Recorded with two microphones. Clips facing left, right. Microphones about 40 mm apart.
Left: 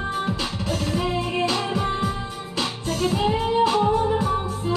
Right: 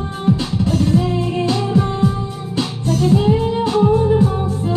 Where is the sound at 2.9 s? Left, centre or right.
Left.